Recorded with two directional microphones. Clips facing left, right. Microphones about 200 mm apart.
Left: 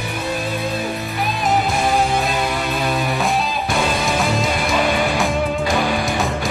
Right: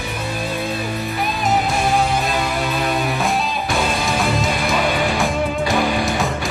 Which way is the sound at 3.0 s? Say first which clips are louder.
Even; centre (ahead or behind).